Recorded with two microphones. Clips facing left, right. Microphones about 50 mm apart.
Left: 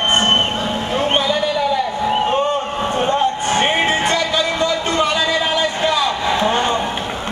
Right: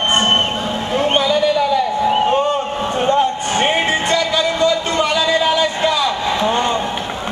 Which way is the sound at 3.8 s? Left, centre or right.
Left.